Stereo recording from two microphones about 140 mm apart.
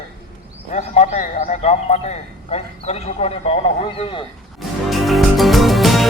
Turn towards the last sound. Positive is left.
turn(degrees=0)  # may be behind; listen again after turning